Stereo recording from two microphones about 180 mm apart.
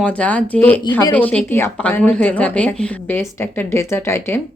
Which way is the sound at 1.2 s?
10° left (ahead or behind).